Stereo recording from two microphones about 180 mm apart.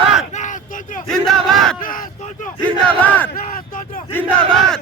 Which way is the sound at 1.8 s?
50° left (ahead or behind).